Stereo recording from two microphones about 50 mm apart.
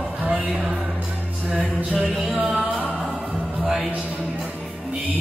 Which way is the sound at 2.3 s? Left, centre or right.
Centre.